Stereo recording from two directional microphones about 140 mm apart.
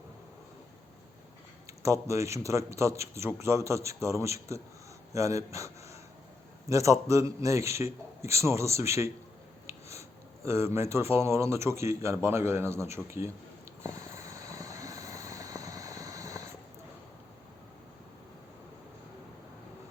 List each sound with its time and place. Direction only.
1.8 s a man's voice: 20° right (ahead or behind)
13.8 s vehicle: 25° right (ahead or behind)